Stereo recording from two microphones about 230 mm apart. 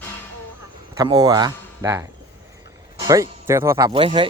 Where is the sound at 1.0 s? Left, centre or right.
Centre.